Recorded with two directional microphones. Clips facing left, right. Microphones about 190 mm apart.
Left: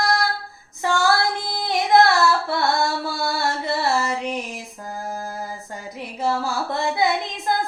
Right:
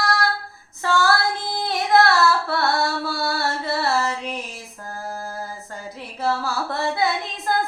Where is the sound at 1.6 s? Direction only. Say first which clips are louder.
Left 2 dB; 15° left (ahead or behind).